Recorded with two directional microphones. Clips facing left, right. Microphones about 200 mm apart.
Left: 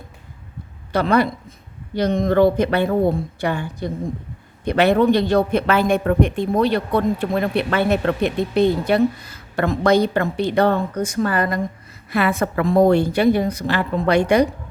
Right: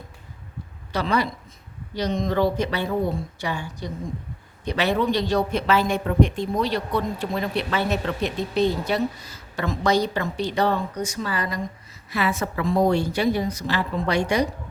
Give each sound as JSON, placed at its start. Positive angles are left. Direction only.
{"t": 0.9, "sound": "speech", "side_deg": 55}